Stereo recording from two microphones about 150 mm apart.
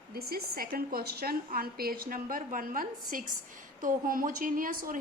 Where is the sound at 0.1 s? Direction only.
90° right.